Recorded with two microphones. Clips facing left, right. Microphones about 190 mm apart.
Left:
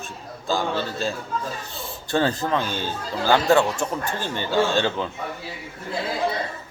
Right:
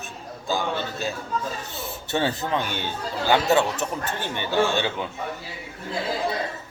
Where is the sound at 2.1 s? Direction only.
20° right (ahead or behind).